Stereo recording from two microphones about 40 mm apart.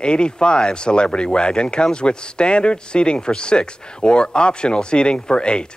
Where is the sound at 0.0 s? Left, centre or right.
Left.